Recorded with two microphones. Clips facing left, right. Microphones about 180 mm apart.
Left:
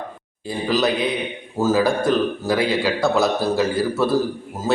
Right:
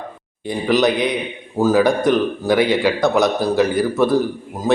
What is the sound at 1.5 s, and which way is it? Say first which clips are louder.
A man's voice: right 3 dB; 15° right (ahead or behind).